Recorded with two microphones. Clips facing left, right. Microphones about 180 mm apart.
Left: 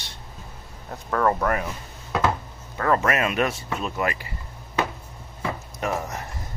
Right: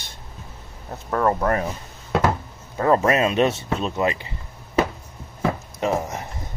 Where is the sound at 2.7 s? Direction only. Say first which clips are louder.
Right 4 dB; 25° right (ahead or behind).